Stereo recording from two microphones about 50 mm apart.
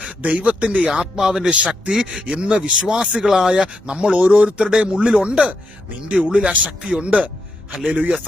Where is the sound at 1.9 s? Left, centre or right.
Centre.